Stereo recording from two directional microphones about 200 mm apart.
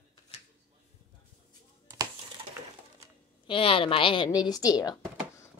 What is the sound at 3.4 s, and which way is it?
A woman's voice, 25° left (ahead or behind).